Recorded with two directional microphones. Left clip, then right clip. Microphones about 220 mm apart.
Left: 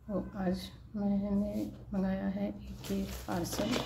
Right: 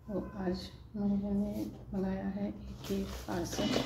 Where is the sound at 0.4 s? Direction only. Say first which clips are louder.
Left 1 dB; 30° left (ahead or behind).